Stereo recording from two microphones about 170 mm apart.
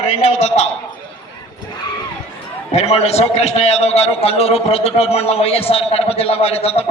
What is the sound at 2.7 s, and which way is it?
A man's voice, 40° left (ahead or behind).